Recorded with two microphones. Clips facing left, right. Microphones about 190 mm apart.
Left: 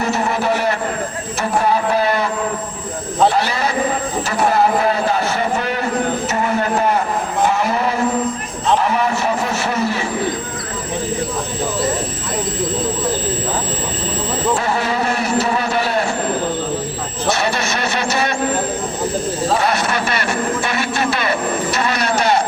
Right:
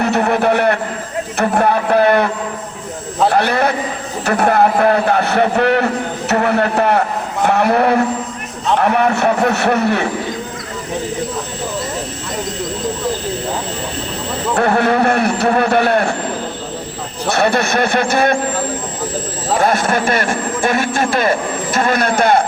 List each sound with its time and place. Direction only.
0.0 s a man's voice: 60° right (ahead or behind)
14.5 s a man's voice: 60° right (ahead or behind)
17.3 s a man's voice: 55° right (ahead or behind)
19.5 s a man's voice: 50° right (ahead or behind)